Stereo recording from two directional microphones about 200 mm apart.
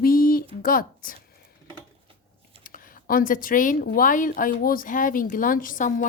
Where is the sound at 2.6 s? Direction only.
45° left (ahead or behind).